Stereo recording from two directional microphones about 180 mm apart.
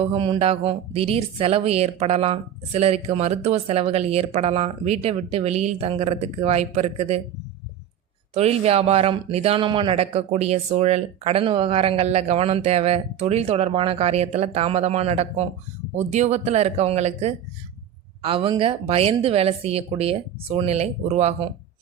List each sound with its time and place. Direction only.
0.0 s speech: 30° right (ahead or behind)
8.3 s speech: 35° right (ahead or behind)